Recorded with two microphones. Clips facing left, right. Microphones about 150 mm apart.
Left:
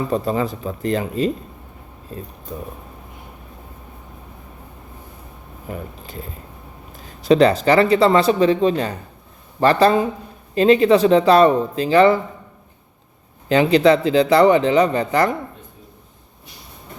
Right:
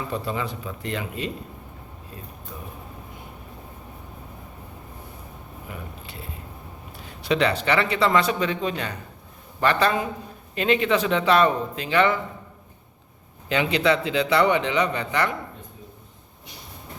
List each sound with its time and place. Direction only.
0.1 s a man's voice: 40° left (ahead or behind)
5.6 s a man's voice: 40° left (ahead or behind)
13.5 s a man's voice: 35° left (ahead or behind)